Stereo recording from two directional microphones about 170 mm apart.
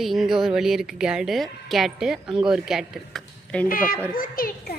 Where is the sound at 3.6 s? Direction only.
55° left (ahead or behind).